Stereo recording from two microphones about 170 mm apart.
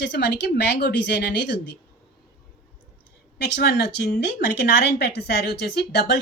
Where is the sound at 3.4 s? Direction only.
75° left (ahead or behind).